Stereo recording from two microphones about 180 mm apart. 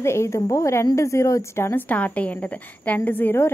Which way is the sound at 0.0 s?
15° left (ahead or behind).